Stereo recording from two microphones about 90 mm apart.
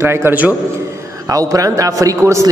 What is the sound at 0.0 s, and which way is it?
Speech, 30° right (ahead or behind).